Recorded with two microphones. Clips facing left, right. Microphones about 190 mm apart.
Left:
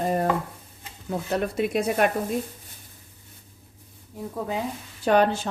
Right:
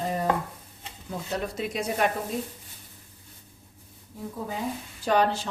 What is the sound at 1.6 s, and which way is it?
Speech, 55° left (ahead or behind).